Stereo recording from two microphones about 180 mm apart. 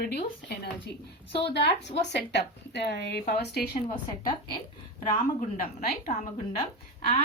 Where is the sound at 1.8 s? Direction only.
40° left (ahead or behind).